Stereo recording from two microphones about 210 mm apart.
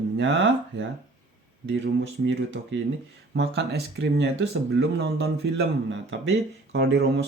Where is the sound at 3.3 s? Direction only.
60° right (ahead or behind).